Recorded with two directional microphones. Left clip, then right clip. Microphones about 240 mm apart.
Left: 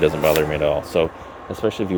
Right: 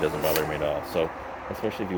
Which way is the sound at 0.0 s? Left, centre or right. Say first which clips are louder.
Left 8 dB; left.